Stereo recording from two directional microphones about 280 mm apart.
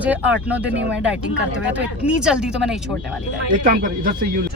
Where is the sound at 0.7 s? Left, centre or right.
Right.